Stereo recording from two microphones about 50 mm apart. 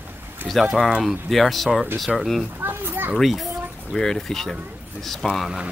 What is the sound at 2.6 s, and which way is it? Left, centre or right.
Speech, right.